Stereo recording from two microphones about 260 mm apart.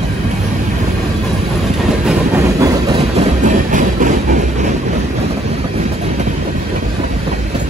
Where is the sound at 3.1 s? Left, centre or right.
Right.